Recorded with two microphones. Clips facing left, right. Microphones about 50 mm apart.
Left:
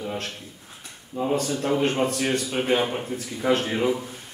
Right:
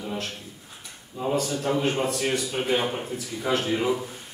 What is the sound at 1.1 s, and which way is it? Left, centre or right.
Speech, left.